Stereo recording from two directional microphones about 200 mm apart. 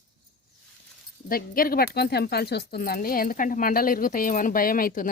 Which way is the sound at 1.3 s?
45° left (ahead or behind).